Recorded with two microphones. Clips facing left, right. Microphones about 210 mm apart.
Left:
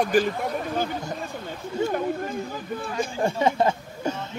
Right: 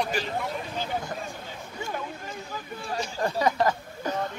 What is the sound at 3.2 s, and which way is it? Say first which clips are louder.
Speech: left 2 dB; 25° left (ahead or behind).